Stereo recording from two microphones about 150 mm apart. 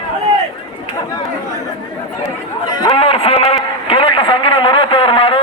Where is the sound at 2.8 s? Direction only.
40° left (ahead or behind).